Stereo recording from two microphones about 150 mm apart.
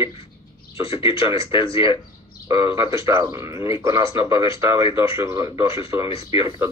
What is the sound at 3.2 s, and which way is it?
Speech, 20° right (ahead or behind).